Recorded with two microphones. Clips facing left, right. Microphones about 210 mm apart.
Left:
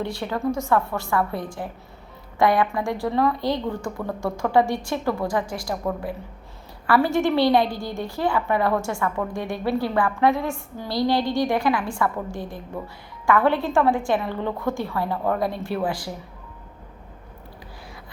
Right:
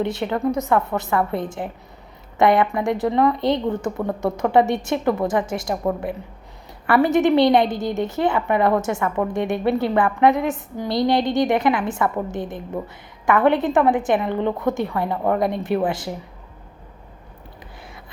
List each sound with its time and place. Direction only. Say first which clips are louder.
0.0 s speech: right 4 dB; 20° right (ahead or behind)